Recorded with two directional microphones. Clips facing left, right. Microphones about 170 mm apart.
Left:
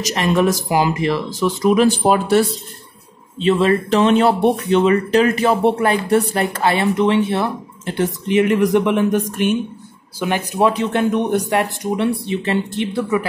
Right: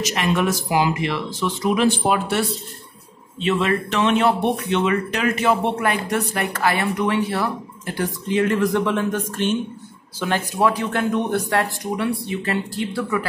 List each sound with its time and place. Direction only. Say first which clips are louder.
0.0 s speech: left 4 dB; 35° left (ahead or behind); by 13.3 s 20° left (ahead or behind)